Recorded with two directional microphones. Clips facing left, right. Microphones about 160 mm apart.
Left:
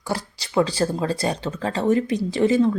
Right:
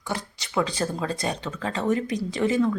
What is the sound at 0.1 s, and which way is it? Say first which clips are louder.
Speech: left 4 dB; 35° left (ahead or behind).